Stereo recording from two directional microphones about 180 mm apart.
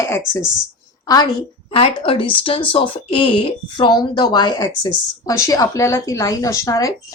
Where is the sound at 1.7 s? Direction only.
30° left (ahead or behind).